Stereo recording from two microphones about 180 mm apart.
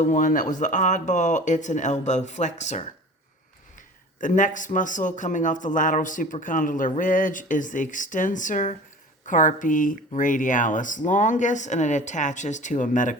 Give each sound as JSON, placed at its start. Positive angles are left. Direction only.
{"t": 0.0, "sound": "speech", "side_deg": 45}
{"t": 4.2, "sound": "speech", "side_deg": 45}